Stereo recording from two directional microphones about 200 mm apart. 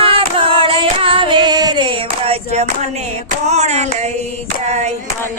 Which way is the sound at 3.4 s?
35° right (ahead or behind).